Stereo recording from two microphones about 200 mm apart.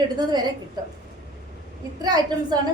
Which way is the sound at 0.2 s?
20° right (ahead or behind).